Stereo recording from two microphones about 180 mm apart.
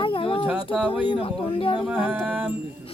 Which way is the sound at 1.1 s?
30° left (ahead or behind).